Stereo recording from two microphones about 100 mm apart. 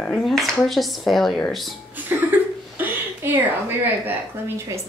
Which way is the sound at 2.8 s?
20° right (ahead or behind).